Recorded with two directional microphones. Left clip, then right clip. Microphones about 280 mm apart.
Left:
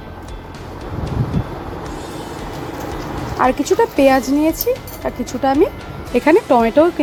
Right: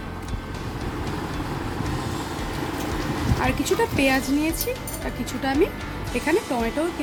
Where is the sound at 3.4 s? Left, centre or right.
Centre.